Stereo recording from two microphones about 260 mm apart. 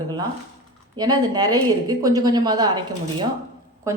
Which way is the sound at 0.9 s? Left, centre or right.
Centre.